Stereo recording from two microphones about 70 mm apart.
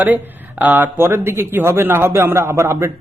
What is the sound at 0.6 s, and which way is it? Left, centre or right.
A man's voice, right.